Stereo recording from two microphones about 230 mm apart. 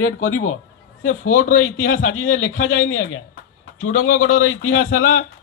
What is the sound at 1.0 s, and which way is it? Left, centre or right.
A man's voice, left.